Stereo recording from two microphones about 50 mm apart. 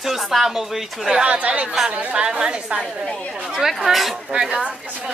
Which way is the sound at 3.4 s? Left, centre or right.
Centre.